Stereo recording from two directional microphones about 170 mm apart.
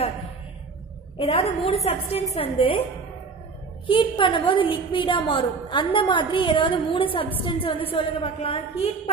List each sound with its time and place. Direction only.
1.1 s a woman's voice: 30° left (ahead or behind)
3.8 s a woman's voice: 30° left (ahead or behind)